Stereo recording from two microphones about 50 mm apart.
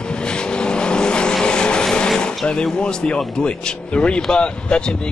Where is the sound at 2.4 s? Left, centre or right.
Centre.